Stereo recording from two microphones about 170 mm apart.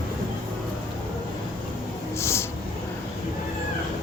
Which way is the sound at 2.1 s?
15° left (ahead or behind).